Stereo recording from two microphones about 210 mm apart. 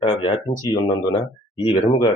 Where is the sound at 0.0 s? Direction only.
25° left (ahead or behind).